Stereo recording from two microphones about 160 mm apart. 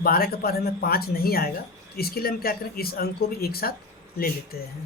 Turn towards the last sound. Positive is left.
turn(degrees=75)  # may be behind; listen again after turning